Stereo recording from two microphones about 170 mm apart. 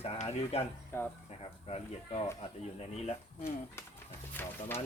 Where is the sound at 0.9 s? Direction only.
15° left (ahead or behind).